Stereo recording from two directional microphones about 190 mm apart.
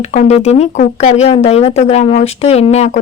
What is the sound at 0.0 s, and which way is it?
Speech, 40° left (ahead or behind).